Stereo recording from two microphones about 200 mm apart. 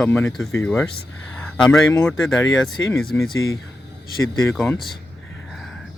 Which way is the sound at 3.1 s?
10° left (ahead or behind).